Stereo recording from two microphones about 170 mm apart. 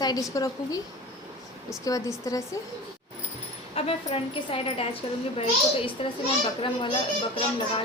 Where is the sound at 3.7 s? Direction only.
35° left (ahead or behind).